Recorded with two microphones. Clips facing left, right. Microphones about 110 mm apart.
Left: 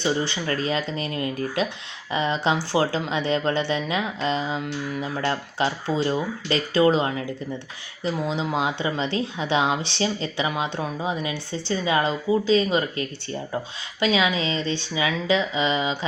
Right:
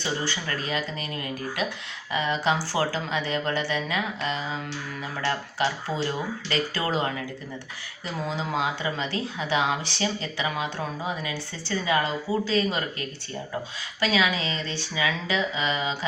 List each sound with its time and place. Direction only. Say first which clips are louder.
0.0 s speech: left 5 dB; 25° left (ahead or behind)
2.1 s speech: left 2 dB; 25° left (ahead or behind)
8.4 s speech: left 3 dB; 25° left (ahead or behind)